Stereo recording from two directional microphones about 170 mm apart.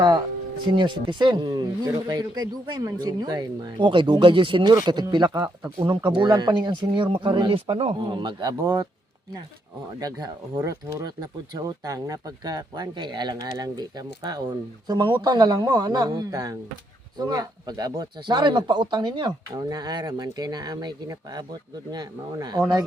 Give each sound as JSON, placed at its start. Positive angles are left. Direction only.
{"t": 0.7, "sound": "speech", "side_deg": -25}
{"t": 10.0, "sound": "speech", "side_deg": -25}